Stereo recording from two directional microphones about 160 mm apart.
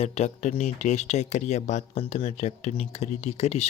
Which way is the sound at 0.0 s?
45° left (ahead or behind).